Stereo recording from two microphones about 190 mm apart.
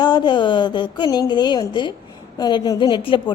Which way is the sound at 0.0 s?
25° left (ahead or behind).